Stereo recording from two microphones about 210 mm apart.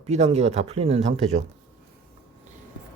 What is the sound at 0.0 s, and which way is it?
Speech, 30° right (ahead or behind).